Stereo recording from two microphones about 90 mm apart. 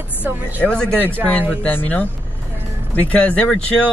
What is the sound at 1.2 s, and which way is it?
Speech, 20° right (ahead or behind).